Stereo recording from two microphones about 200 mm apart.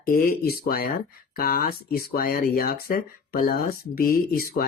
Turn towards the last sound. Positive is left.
turn(degrees=45)  # may be behind; listen again after turning